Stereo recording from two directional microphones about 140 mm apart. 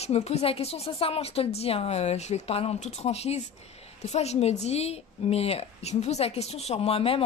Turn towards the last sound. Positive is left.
turn(degrees=45)  # may be behind; listen again after turning